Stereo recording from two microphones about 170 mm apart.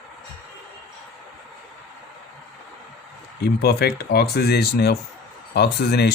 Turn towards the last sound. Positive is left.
turn(degrees=70)  # may be behind; listen again after turning